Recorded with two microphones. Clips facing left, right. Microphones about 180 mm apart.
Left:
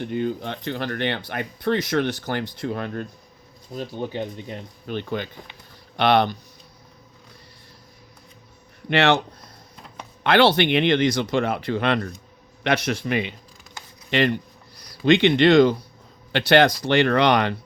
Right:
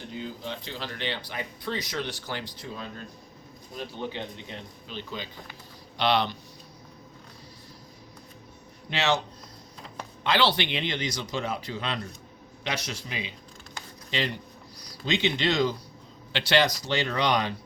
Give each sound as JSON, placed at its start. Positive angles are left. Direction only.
{"t": 0.0, "sound": "speech", "side_deg": 60}
{"t": 3.8, "sound": "speech", "side_deg": 45}
{"t": 8.9, "sound": "speech", "side_deg": 60}
{"t": 10.2, "sound": "speech", "side_deg": 55}